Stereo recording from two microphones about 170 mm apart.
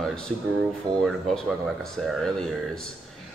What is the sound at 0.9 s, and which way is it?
Speech, 20° right (ahead or behind).